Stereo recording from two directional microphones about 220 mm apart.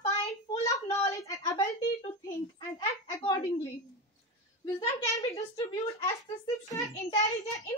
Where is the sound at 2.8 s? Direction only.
20° left (ahead or behind).